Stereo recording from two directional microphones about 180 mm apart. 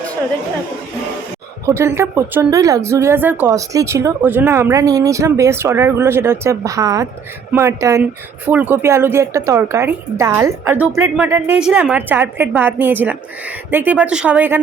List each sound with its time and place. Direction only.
1.6 s speech: 15° right (ahead or behind)